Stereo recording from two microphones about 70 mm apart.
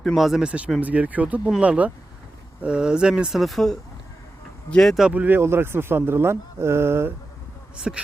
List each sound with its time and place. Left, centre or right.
0.0 s speech: centre
0.4 s speech: centre
4.8 s speech: centre
5.0 s speech: right
5.4 s speech: right
7.8 s speech: centre